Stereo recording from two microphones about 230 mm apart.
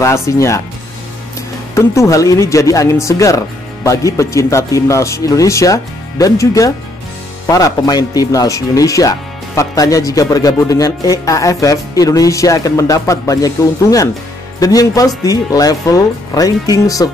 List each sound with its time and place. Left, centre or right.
0.0 s speech: centre
1.8 s speech: centre